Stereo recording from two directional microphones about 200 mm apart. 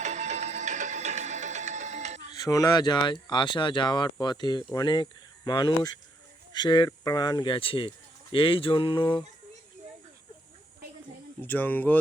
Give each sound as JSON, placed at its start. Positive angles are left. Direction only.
{"t": 0.0, "sound": "music", "side_deg": -35}
{"t": 2.3, "sound": "speech", "side_deg": 20}
{"t": 11.4, "sound": "speech", "side_deg": 10}